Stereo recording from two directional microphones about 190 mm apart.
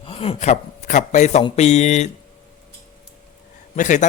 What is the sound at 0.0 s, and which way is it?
A man's voice, 30° left (ahead or behind).